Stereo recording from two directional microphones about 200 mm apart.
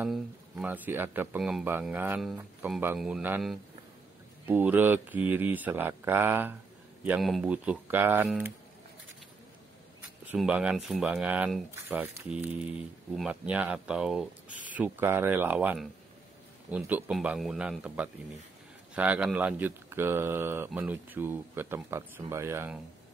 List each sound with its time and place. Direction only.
0.0 s speech: 5° right (ahead or behind)
10.2 s speech: 5° right (ahead or behind)